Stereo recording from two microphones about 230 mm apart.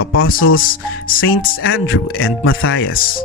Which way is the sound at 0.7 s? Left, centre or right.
Left.